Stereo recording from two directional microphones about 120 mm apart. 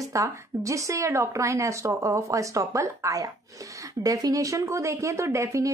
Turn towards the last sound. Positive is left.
turn(degrees=-25)  # may be behind; listen again after turning